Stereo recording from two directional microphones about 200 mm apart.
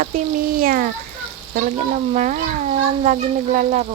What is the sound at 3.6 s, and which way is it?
Cat, 40° right (ahead or behind).